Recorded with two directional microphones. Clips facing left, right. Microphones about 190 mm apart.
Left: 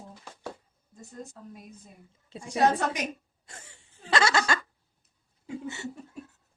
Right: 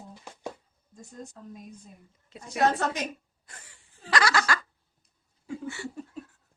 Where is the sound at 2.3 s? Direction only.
30° left (ahead or behind).